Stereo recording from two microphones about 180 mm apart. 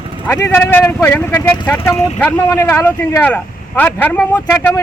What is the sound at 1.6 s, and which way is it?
Speech, 25° left (ahead or behind).